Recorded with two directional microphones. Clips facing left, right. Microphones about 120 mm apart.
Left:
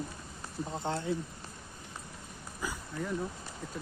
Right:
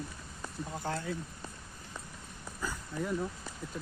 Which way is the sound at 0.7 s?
25° left (ahead or behind).